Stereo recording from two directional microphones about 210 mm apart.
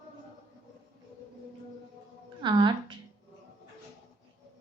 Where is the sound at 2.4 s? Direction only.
20° right (ahead or behind).